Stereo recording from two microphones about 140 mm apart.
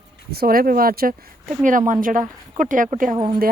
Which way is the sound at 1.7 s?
70° right (ahead or behind).